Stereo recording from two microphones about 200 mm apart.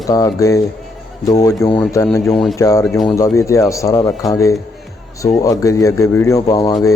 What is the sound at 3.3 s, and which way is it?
Speech, 15° left (ahead or behind).